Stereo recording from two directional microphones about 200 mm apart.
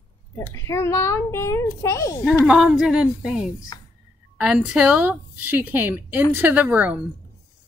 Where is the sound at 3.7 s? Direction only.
20° left (ahead or behind).